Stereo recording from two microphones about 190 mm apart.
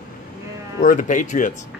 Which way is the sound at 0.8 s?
45° left (ahead or behind).